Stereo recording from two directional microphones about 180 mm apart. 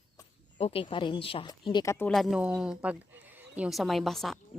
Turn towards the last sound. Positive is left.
turn(degrees=0)  # may be behind; listen again after turning